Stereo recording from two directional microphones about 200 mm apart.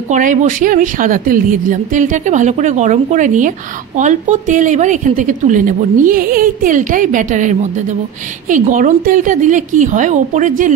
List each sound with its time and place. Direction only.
0.1 s speech: 40° right (ahead or behind)